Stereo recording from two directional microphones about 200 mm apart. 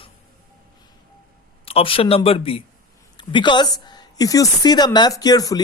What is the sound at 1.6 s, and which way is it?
A man's voice, 25° left (ahead or behind).